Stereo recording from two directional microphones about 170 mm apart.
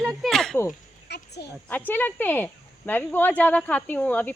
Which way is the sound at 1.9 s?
10° left (ahead or behind).